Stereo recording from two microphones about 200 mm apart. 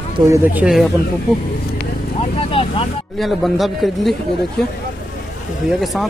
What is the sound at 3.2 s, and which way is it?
Speech, centre (ahead or behind).